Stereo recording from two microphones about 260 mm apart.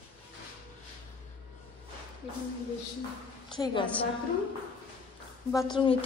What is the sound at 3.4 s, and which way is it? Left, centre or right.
Speech, centre.